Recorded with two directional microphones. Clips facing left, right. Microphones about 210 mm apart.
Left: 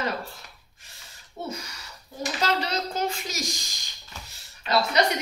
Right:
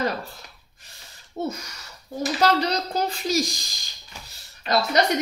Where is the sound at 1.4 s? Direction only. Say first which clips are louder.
Right 7 dB; 40° right (ahead or behind).